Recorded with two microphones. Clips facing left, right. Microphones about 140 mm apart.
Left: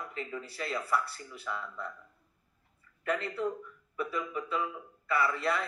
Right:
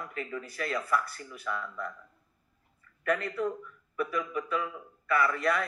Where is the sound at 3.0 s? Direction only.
25° left (ahead or behind).